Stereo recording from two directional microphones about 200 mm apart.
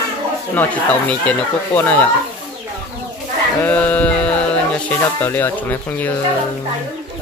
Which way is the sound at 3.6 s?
5° left (ahead or behind).